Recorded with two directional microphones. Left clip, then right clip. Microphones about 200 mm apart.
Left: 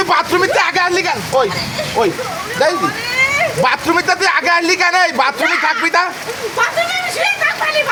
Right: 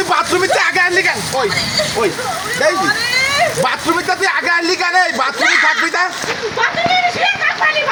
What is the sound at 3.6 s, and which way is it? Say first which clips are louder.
Speech: left 2 dB; 30° left (ahead or behind).